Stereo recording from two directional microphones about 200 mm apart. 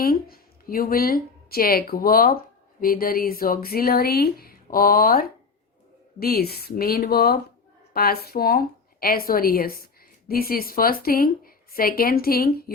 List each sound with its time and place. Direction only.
0.0 s a woman's voice: 50° left (ahead or behind)